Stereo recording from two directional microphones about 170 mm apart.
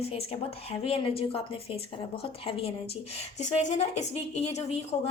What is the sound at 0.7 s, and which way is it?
A woman's voice, 35° left (ahead or behind).